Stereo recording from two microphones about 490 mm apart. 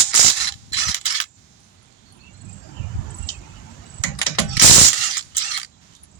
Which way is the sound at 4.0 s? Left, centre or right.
Left.